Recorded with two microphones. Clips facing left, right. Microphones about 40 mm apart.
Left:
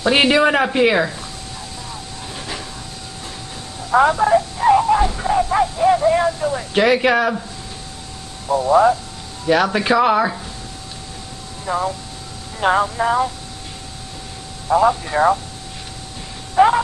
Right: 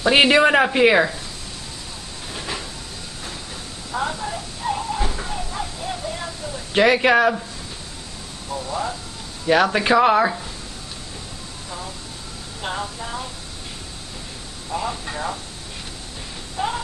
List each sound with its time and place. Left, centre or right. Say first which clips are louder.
0.0 s speech: even; centre
2.3 s a sound: right 1 dB; centre
4.2 s a sound: left 13 dB; left
6.7 s speech: even; centre
8.5 s speech: left 13 dB; left
9.5 s speech: left 1 dB; centre
11.6 s speech: left 14 dB; left
14.7 s speech: left 12 dB; left
16.5 s a sound: left 13 dB; left